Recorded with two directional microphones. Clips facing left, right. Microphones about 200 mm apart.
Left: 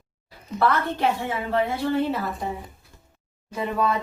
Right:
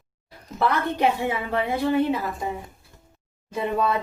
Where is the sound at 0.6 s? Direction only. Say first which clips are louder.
Even; 15° right (ahead or behind).